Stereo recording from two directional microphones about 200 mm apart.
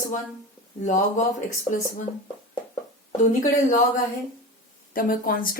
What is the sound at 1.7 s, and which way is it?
Speech, 10° left (ahead or behind).